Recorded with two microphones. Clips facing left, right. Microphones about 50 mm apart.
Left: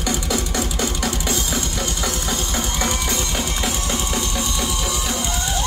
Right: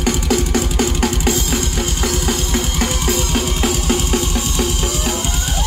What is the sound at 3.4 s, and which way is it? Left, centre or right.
Music, centre.